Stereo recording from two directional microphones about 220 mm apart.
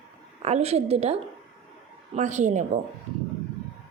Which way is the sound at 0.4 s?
30° right (ahead or behind).